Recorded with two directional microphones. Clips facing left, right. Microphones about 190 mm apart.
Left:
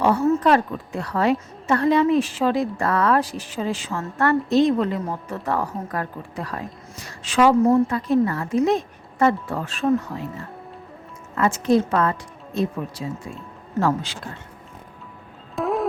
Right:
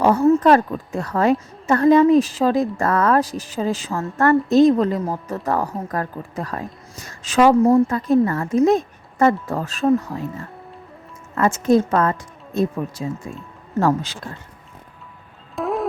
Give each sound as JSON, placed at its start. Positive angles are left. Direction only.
{"t": 0.0, "sound": "a woman's voice", "side_deg": -40}
{"t": 11.3, "sound": "a woman's voice", "side_deg": -45}
{"t": 13.7, "sound": "a woman's voice", "side_deg": -45}
{"t": 15.5, "sound": "music", "side_deg": 0}